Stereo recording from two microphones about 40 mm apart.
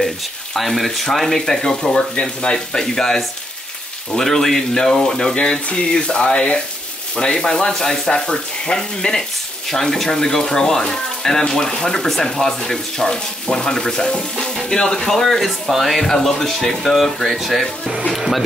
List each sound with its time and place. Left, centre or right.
0.6 s speech: centre
1.4 s speech: centre
5.3 s frying: left
7.2 s speech: centre